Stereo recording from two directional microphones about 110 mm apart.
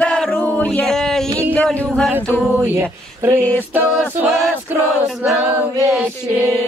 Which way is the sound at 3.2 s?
20° right (ahead or behind).